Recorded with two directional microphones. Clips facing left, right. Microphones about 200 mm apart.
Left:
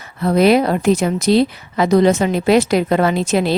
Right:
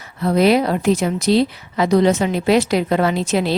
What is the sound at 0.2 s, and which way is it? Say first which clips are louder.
Speech: left 2 dB; 50° left (ahead or behind).